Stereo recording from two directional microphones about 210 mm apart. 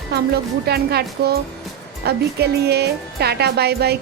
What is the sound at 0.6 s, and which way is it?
Speech, 50° right (ahead or behind).